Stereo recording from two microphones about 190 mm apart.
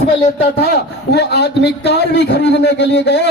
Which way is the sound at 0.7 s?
60° left (ahead or behind).